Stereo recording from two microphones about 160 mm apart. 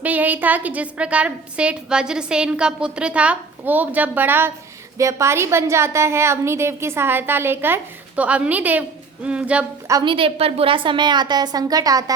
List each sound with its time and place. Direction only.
0.0 s a woman's voice: 10° right (ahead or behind)
9.8 s a woman's voice: 25° right (ahead or behind)